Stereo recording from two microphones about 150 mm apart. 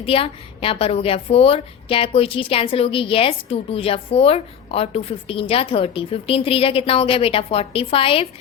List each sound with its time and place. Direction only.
0.0 s speech: 40° left (ahead or behind)